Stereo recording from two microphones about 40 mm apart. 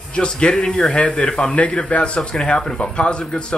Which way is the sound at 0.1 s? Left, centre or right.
Left.